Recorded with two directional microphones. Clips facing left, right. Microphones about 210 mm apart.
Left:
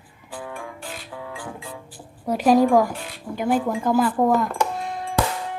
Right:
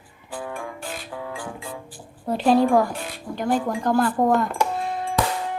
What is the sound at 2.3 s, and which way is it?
Speech, 15° left (ahead or behind).